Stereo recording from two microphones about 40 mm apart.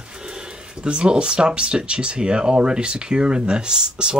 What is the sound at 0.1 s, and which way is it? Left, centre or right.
Speech, right.